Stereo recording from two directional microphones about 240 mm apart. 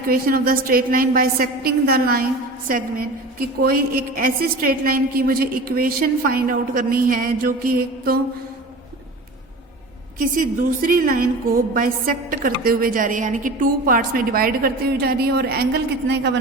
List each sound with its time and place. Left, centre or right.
0.1 s a woman's voice: right
3.6 s a woman's voice: right
10.2 s a woman's voice: right